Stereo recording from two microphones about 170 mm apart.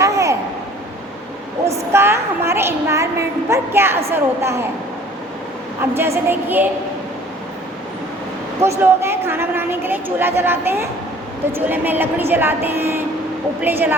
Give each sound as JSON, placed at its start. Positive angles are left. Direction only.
{"t": 0.0, "sound": "a sound", "side_deg": -20}
{"t": 1.9, "sound": "a woman's voice", "side_deg": -15}
{"t": 6.0, "sound": "a woman's voice", "side_deg": -15}
{"t": 8.8, "sound": "a woman's voice", "side_deg": -15}